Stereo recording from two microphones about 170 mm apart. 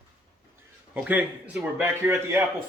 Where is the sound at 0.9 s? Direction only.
10° right (ahead or behind).